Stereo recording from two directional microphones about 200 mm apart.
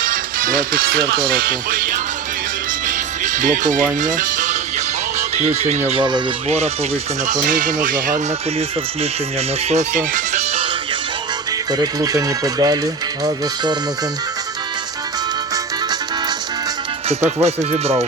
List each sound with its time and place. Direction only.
0.0 s speech: 45° right (ahead or behind)
2.8 s music: 40° right (ahead or behind)
5.4 s speech: 35° right (ahead or behind)
5.9 s speech: 25° right (ahead or behind)
7.5 s speech: 40° right (ahead or behind)
9.6 s speech: 35° right (ahead or behind)
11.7 s speech: 20° right (ahead or behind)
17.1 s speech: 35° right (ahead or behind)